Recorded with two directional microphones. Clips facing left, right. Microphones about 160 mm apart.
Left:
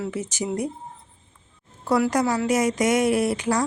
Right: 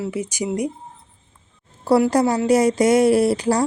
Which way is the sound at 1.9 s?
30° right (ahead or behind).